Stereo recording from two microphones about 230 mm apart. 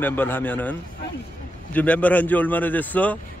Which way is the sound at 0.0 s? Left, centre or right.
Centre.